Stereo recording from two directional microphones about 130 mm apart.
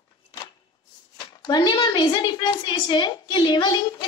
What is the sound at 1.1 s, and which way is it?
A woman's voice, 35° left (ahead or behind).